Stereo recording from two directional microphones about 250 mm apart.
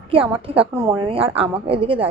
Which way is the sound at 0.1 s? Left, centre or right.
Right.